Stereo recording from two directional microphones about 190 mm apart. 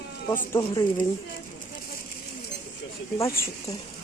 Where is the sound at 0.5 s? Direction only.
20° left (ahead or behind).